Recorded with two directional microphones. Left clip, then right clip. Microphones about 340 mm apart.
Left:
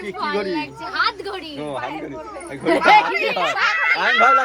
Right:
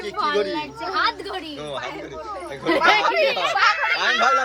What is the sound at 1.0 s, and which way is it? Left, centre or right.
Speech, centre.